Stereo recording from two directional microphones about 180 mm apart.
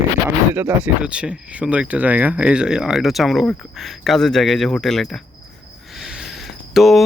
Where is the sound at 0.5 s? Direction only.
10° right (ahead or behind).